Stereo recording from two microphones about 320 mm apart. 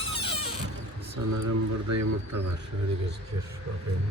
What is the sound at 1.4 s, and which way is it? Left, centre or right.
Speech, right.